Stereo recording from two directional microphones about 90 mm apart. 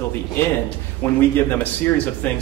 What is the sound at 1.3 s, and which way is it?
Speech, 20° left (ahead or behind).